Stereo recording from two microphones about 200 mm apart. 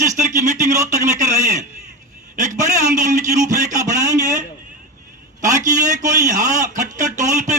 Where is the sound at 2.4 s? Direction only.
35° right (ahead or behind).